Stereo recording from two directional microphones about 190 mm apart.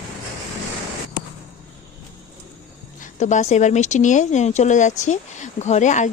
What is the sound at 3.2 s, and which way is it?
Speech, 40° left (ahead or behind).